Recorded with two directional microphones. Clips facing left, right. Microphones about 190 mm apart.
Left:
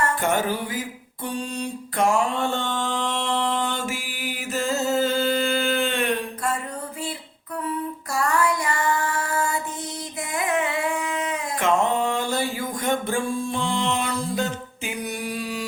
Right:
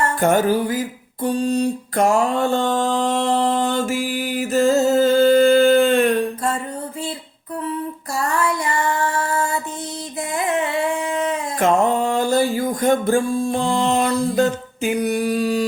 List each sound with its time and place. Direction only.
0.2 s music: 40° right (ahead or behind)
1.2 s mantra: 40° right (ahead or behind)
8.3 s a sound: 25° right (ahead or behind)
10.3 s singing: 30° right (ahead or behind)